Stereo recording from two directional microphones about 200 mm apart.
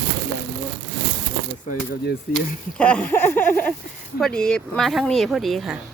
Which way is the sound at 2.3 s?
50° left (ahead or behind).